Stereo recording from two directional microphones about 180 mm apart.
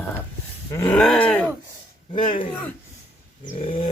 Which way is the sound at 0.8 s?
15° left (ahead or behind).